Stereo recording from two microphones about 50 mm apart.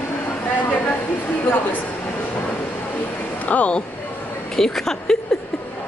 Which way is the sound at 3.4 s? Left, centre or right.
Left.